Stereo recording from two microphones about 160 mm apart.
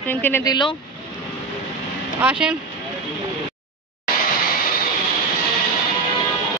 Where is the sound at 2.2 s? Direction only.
5° right (ahead or behind).